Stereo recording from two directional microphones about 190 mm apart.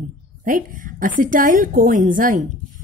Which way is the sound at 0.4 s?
45° right (ahead or behind).